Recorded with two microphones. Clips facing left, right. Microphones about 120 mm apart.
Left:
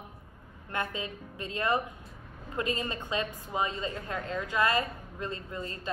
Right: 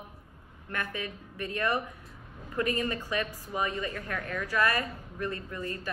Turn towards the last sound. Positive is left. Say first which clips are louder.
# right 1 dB
turn(degrees=25)  # may be behind; listen again after turning